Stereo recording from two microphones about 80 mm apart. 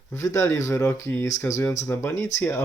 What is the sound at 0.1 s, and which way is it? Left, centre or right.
Speech, left.